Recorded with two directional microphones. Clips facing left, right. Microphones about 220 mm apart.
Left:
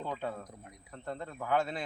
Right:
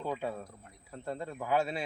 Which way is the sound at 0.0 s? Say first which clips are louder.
Right 2 dB; 10° right (ahead or behind).